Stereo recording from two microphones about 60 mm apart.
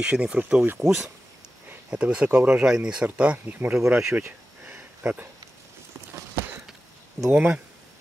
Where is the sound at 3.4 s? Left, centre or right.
Right.